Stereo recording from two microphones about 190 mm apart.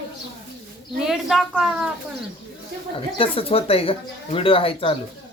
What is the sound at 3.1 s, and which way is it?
Speech, 30° left (ahead or behind).